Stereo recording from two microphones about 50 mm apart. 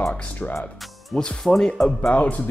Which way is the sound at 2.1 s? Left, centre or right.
Left.